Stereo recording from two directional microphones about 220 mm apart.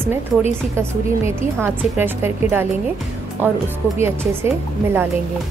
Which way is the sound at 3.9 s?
10° right (ahead or behind).